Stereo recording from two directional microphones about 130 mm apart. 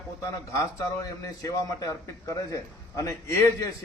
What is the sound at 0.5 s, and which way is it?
A man's voice, 25° left (ahead or behind).